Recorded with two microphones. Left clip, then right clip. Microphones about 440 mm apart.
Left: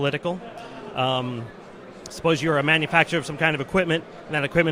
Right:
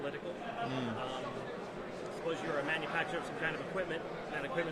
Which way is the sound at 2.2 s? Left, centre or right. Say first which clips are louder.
Left 16 dB; left.